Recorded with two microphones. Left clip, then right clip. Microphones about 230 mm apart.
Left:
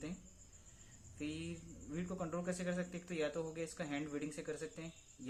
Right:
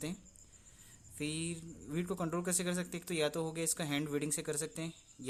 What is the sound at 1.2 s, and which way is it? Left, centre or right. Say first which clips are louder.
Speech: right 5 dB; right.